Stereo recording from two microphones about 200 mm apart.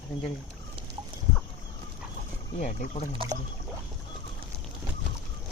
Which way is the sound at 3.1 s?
25° right (ahead or behind).